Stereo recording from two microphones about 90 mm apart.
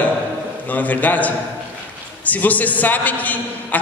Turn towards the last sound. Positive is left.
turn(degrees=20)  # may be behind; listen again after turning